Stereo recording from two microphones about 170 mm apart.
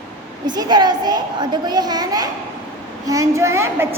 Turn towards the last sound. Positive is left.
turn(degrees=-15)  # may be behind; listen again after turning